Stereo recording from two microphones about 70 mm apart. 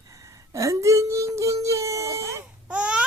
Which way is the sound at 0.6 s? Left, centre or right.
Right.